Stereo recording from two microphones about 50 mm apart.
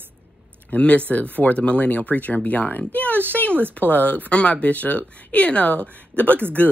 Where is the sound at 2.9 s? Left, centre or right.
Left.